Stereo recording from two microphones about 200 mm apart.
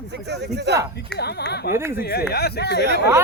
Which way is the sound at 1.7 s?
10° right (ahead or behind).